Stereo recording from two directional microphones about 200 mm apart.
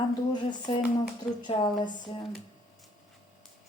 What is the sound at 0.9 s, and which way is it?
Speech, 20° left (ahead or behind).